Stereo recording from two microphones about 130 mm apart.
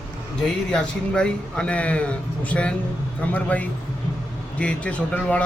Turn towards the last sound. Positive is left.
turn(degrees=10)  # may be behind; listen again after turning